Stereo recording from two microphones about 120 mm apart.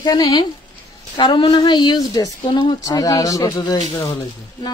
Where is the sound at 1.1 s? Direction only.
45° left (ahead or behind).